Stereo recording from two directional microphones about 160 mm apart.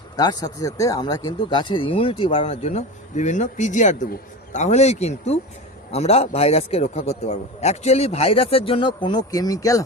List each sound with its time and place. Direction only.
0.2 s speech: 25° left (ahead or behind)